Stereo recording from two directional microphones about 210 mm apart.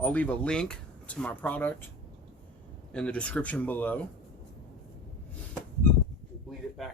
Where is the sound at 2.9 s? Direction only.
5° left (ahead or behind).